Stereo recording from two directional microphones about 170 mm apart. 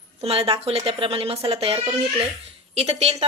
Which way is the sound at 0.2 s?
35° right (ahead or behind).